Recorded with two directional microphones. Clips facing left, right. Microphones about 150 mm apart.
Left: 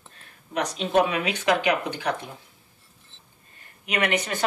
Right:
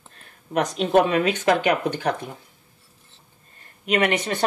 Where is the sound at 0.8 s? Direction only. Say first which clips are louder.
Right 4 dB; 45° right (ahead or behind).